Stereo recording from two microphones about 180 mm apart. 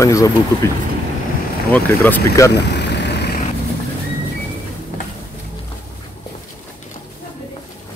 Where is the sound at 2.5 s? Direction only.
70° left (ahead or behind).